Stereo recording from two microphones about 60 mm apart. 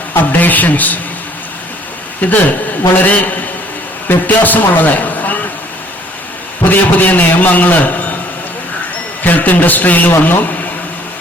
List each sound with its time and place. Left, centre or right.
0.1 s a man's voice: left
2.2 s a man's voice: left
6.7 s a man's voice: left
9.2 s a man's voice: left
10.1 s speech: left